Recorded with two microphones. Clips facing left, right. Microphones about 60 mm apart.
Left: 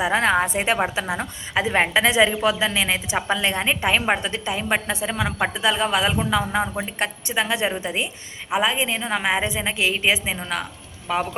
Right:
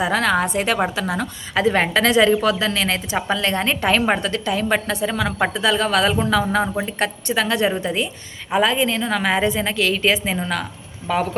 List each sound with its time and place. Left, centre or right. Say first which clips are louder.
0.0 s a woman's voice: right 1 dB; left; by 11.2 s centre